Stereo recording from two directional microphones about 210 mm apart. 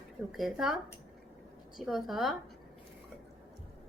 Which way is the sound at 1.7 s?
Centre (ahead or behind).